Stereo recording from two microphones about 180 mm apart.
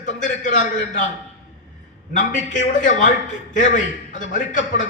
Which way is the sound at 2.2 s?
45° left (ahead or behind).